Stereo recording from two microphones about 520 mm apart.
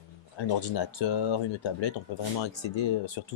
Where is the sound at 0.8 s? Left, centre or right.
Left.